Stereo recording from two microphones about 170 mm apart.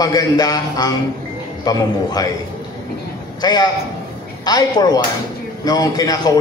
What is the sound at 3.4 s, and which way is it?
A man's voice, 25° left (ahead or behind).